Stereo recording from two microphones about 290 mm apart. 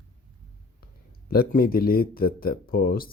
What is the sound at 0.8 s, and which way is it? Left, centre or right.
Speech, left.